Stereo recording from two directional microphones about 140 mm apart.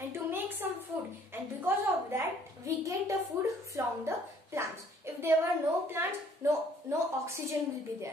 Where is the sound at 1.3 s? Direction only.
15° right (ahead or behind).